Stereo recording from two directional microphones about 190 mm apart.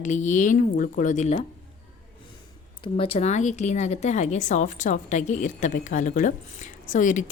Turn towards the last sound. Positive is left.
turn(degrees=40)  # may be behind; listen again after turning